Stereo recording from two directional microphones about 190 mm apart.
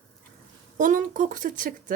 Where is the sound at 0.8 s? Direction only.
45° right (ahead or behind).